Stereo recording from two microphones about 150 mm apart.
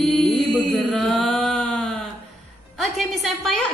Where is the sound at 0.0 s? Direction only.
5° left (ahead or behind).